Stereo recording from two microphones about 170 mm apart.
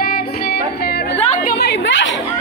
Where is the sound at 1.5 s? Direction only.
75° left (ahead or behind); by 2.1 s 90° left.